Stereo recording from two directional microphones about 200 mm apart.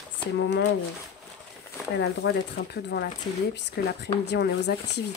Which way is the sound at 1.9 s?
60° left (ahead or behind).